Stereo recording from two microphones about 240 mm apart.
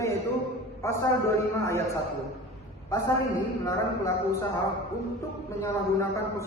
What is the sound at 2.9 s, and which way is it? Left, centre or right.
Speech, centre.